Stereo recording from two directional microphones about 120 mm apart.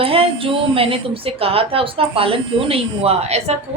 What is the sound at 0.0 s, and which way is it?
Speech, 50° right (ahead or behind).